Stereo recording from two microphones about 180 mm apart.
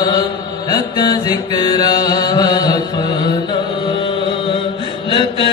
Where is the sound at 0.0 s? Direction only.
25° left (ahead or behind).